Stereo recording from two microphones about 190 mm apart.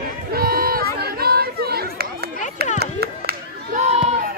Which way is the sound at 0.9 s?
55° right (ahead or behind).